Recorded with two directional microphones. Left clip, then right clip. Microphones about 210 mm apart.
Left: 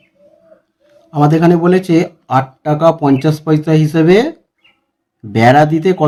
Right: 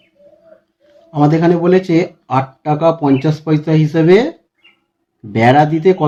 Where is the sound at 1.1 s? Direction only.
25° left (ahead or behind).